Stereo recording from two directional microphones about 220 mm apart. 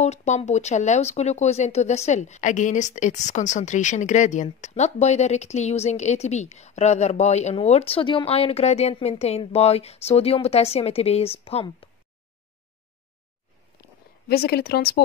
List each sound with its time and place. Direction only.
0.0 s speech: 30° left (ahead or behind)
14.3 s a woman's voice: 45° left (ahead or behind)